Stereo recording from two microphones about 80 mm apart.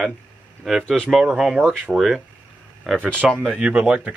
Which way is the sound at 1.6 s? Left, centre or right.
Centre.